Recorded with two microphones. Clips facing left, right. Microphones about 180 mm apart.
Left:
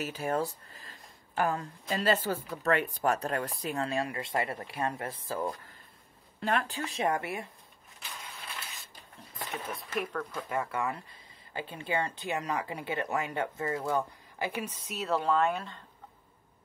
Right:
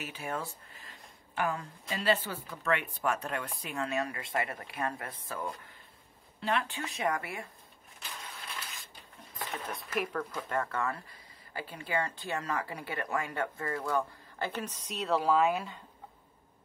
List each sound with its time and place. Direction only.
0.0 s speech: 40° left (ahead or behind)
6.4 s speech: 45° left (ahead or behind)
6.8 s speech: 30° left (ahead or behind)
9.4 s speech: 5° left (ahead or behind)
10.5 s speech: 10° left (ahead or behind)
14.4 s speech: 10° left (ahead or behind); by 15.8 s 5° right (ahead or behind)